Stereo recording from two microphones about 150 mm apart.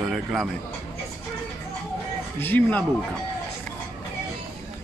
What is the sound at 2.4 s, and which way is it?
Speech, 10° left (ahead or behind).